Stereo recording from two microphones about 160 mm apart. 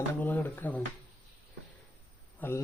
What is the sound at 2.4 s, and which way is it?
Speech, 15° left (ahead or behind).